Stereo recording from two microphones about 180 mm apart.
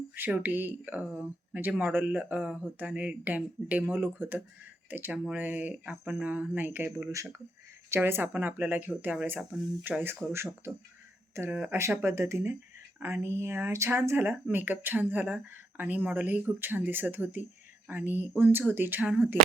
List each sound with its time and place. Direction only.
0.2 s speech: 10° right (ahead or behind)